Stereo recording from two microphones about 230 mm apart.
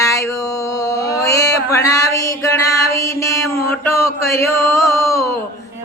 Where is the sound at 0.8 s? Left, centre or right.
Centre.